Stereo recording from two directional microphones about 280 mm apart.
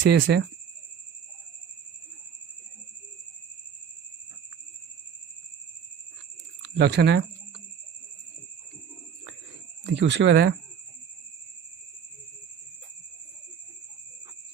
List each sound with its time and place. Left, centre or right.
0.0 s speech: right
6.6 s speech: right
9.8 s speech: right